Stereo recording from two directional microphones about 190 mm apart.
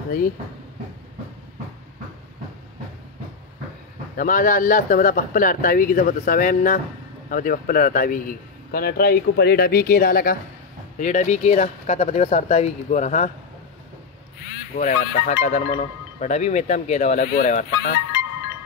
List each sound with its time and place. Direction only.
4.2 s a man's voice: 45° left (ahead or behind)
11.0 s speech: 40° left (ahead or behind)
14.8 s speech: 40° left (ahead or behind)